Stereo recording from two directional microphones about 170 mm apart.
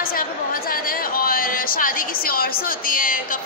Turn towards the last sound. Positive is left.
turn(degrees=55)  # may be behind; listen again after turning